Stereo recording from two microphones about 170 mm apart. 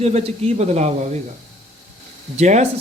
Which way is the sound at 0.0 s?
40° right (ahead or behind).